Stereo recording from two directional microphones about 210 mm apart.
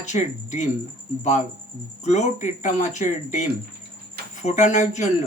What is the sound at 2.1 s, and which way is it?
Speech, 35° left (ahead or behind).